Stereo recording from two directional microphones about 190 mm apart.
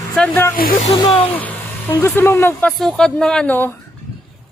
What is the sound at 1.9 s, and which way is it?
Speech, 15° left (ahead or behind).